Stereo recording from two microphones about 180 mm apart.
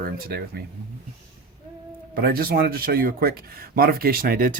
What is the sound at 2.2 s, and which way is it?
Speech, 55° right (ahead or behind).